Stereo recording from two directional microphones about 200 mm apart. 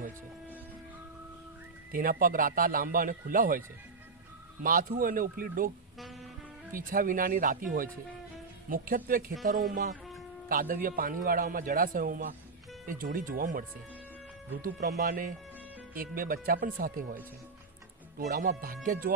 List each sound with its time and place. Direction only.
1.9 s a man's voice: 45° right (ahead or behind)
4.6 s a man's voice: 45° right (ahead or behind)
6.7 s a man's voice: 45° right (ahead or behind)
10.5 s a man's voice: 45° right (ahead or behind)